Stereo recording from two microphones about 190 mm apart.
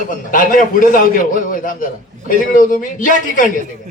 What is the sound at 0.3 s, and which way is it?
A woman's voice, 45° left (ahead or behind).